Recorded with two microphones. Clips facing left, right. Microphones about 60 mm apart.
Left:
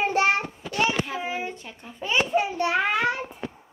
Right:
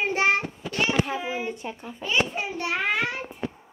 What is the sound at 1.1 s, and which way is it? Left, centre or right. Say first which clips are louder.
Speech: even; centre.